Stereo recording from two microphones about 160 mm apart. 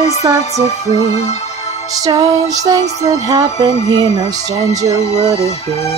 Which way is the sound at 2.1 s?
25° right (ahead or behind).